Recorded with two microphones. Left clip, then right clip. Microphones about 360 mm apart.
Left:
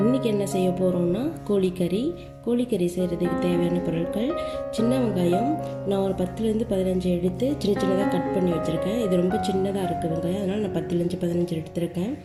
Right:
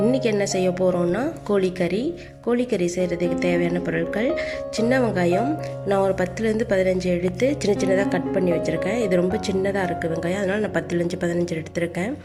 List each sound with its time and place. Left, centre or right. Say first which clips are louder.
0.1 s music: right 3 dB; right
8.6 s speech: right 2 dB; centre
9.1 s music: right 2 dB; right